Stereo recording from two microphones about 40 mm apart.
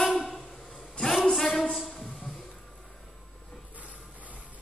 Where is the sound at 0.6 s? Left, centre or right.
Centre.